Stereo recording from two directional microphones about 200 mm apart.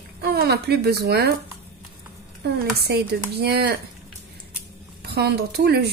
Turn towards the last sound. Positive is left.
turn(degrees=-55)  # may be behind; listen again after turning